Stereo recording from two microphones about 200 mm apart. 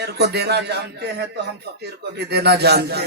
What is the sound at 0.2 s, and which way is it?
Speech, 55° right (ahead or behind).